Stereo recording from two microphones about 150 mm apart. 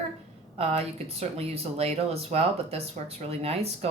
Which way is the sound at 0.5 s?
40° right (ahead or behind).